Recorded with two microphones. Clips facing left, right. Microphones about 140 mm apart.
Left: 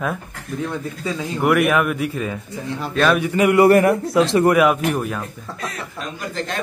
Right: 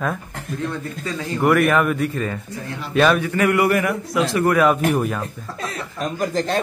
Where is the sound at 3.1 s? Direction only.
20° left (ahead or behind).